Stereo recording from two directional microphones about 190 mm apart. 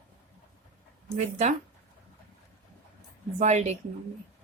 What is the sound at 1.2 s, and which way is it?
Speech, 35° right (ahead or behind).